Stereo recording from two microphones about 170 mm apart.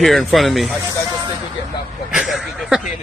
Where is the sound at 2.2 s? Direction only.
Centre (ahead or behind).